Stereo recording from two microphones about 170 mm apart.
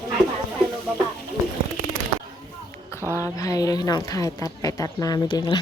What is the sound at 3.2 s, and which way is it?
Speech, 20° left (ahead or behind).